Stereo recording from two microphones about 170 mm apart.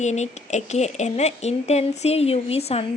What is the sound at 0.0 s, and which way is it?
Speech, 40° left (ahead or behind).